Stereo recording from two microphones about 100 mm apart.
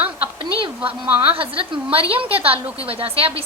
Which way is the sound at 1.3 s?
65° right (ahead or behind).